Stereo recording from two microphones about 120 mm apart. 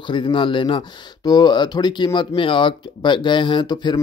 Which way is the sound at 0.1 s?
40° left (ahead or behind).